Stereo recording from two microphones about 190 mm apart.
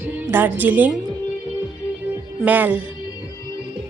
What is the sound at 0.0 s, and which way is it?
Speech, 10° right (ahead or behind).